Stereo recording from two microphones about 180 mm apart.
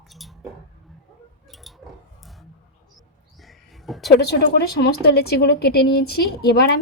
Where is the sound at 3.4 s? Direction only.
Centre (ahead or behind).